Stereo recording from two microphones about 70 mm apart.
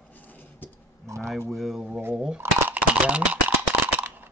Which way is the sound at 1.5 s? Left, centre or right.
Centre.